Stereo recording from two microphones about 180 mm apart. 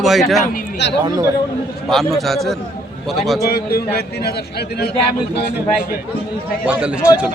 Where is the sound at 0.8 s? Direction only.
75° left (ahead or behind).